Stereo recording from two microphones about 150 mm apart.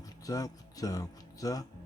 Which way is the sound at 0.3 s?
25° left (ahead or behind).